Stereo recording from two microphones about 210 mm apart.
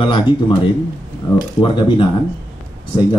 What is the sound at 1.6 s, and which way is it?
Speech, 25° left (ahead or behind).